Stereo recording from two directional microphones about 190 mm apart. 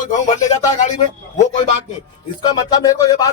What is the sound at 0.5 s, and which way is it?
Speech, 40° left (ahead or behind).